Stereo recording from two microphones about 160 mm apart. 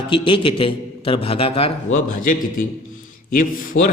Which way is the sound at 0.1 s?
35° left (ahead or behind).